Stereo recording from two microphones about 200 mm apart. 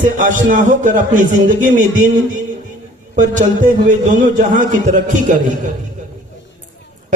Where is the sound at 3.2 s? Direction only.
40° right (ahead or behind).